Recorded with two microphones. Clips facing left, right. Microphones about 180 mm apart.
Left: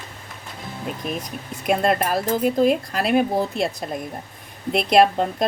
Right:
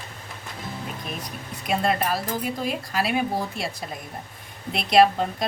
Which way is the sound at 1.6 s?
55° left (ahead or behind).